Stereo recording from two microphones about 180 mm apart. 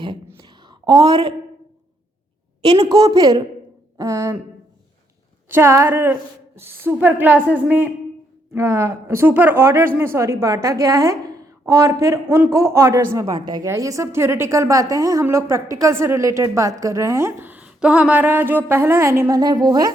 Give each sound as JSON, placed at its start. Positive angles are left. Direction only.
{"t": 0.3, "sound": "a sound", "side_deg": -25}
{"t": 2.6, "sound": "a woman's voice", "side_deg": -25}
{"t": 5.5, "sound": "a woman's voice", "side_deg": -15}